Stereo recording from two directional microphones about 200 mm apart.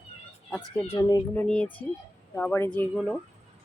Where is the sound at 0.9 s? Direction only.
15° left (ahead or behind).